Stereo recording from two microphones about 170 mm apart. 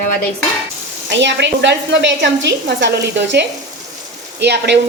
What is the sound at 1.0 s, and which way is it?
A woman's voice, 90° right.